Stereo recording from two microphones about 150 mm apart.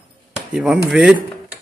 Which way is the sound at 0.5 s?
5° right (ahead or behind).